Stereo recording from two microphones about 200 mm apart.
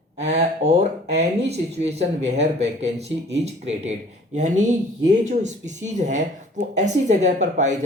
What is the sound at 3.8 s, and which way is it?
Speech, 35° right (ahead or behind).